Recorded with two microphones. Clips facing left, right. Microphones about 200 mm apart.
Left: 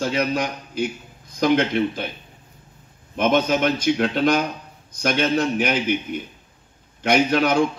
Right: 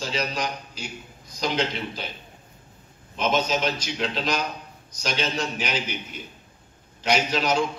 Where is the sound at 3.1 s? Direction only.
55° left (ahead or behind).